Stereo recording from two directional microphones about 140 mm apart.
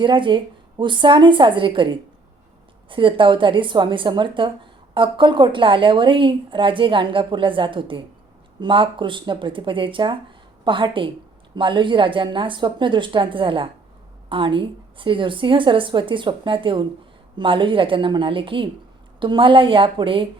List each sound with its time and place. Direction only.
0.0 s a woman's voice: 35° right (ahead or behind)